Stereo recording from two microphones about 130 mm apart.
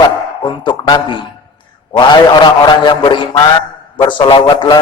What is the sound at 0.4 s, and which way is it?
Speech, 35° left (ahead or behind).